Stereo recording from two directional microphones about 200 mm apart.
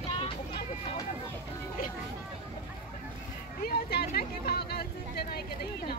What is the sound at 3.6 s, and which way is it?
Vehicle, 50° left (ahead or behind).